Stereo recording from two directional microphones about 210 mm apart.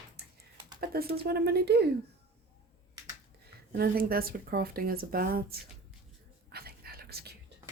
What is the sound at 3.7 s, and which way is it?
Speech, 45° right (ahead or behind).